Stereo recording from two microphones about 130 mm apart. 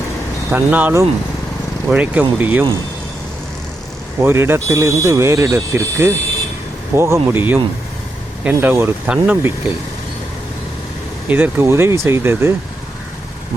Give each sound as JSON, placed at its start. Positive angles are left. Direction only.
{"t": 0.5, "sound": "speech", "side_deg": -15}
{"t": 4.2, "sound": "speech", "side_deg": -15}
{"t": 11.3, "sound": "speech", "side_deg": -15}